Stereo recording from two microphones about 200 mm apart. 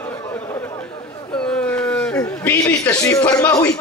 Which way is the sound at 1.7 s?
10° left (ahead or behind).